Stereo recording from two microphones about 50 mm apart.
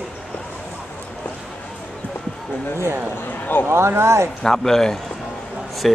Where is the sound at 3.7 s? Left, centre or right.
Right.